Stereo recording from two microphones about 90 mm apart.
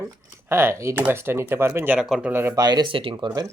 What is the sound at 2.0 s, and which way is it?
Speech, 10° right (ahead or behind).